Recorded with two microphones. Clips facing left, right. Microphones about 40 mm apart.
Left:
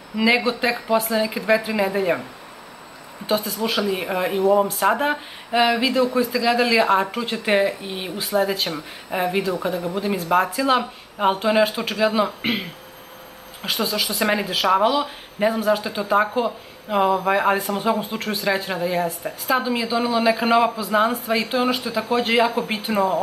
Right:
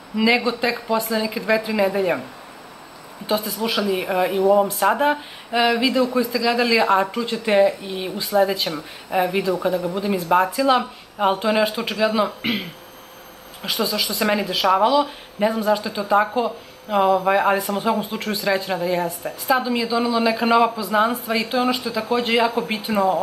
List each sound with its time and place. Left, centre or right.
0.1 s speech: centre
3.4 s speech: centre
7.1 s speech: centre
8.3 s speech: centre